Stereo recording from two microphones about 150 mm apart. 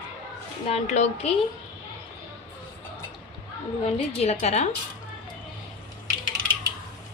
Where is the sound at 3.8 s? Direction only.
45° left (ahead or behind).